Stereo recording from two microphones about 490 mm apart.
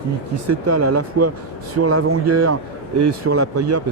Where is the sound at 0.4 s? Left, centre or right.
Right.